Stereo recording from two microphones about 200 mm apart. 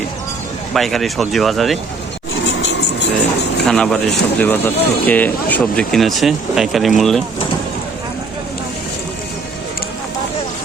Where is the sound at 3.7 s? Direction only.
Centre (ahead or behind).